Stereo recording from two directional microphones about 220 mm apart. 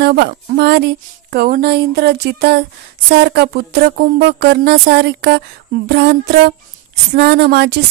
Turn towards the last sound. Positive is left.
turn(degrees=-50)  # may be behind; listen again after turning